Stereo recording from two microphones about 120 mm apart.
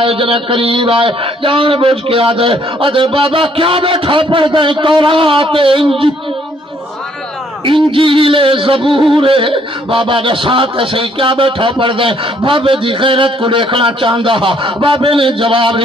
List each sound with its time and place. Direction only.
0.0 s a man's voice: 50° right (ahead or behind)
7.6 s a man's voice: 45° right (ahead or behind)